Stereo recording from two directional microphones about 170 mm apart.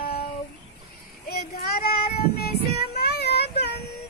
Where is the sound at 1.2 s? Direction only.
65° left (ahead or behind).